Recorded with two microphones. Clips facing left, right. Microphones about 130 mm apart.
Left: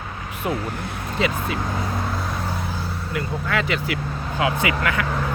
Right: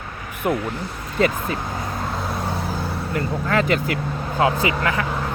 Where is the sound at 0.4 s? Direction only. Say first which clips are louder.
Right 3 dB; 50° right (ahead or behind).